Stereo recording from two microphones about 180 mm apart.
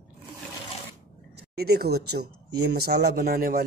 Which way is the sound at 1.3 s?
60° right (ahead or behind).